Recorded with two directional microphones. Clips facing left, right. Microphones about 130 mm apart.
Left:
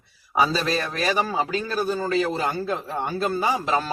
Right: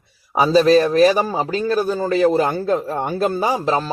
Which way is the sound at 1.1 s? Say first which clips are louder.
Right 4 dB; 40° right (ahead or behind).